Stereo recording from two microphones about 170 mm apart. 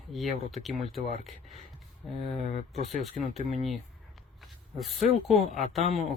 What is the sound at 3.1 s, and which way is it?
Speech, 40° right (ahead or behind).